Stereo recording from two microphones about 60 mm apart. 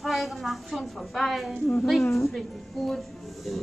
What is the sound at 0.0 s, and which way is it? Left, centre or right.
A woman's voice, centre.